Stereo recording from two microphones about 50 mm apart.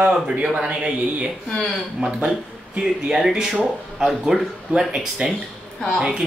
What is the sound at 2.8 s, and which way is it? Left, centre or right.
Speech, centre.